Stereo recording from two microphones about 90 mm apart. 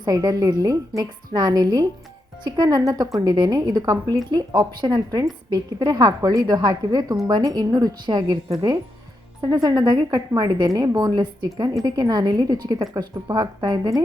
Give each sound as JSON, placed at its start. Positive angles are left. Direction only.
{"t": 0.0, "sound": "a woman's voice", "side_deg": -40}
{"t": 9.4, "sound": "a woman's voice", "side_deg": -45}